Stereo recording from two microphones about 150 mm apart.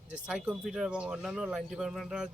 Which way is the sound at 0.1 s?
5° right (ahead or behind).